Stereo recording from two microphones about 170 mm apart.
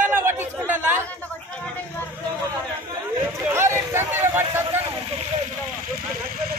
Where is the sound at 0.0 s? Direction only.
15° right (ahead or behind).